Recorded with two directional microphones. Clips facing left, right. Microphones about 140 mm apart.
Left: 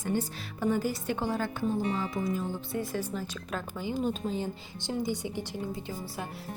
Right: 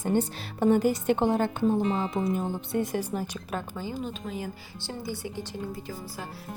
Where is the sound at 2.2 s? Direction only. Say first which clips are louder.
Right 3 dB; 60° right (ahead or behind).